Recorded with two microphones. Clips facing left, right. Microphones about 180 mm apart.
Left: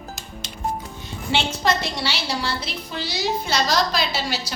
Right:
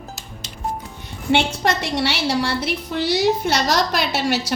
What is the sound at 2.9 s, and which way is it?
Speech, 60° right (ahead or behind).